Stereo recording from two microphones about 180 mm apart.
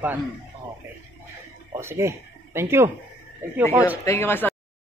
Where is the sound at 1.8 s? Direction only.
15° right (ahead or behind).